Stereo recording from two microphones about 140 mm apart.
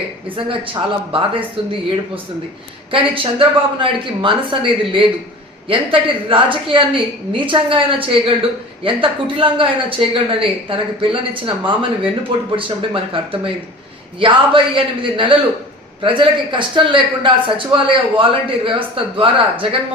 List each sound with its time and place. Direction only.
0.3 s a woman's voice: 40° right (ahead or behind)
2.9 s a woman's voice: 40° right (ahead or behind)